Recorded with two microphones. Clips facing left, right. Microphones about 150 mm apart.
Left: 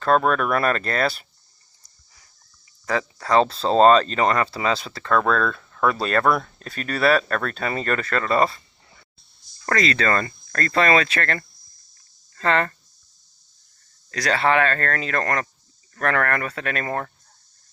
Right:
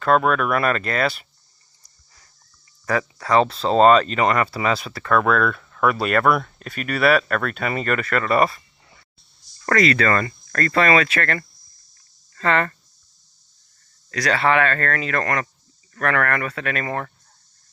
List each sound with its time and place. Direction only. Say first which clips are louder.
0.0 s speech: right 1 dB; 35° left (ahead or behind)
2.8 s speech: right 2 dB; 25° left (ahead or behind)
9.6 s speech: right 3 dB; 30° left (ahead or behind)
12.4 s speech: right 1 dB; 35° left (ahead or behind)
14.1 s speech: right 1 dB; 30° left (ahead or behind)